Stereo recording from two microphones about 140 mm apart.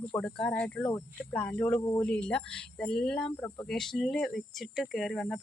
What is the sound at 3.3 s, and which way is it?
Speech, 20° left (ahead or behind).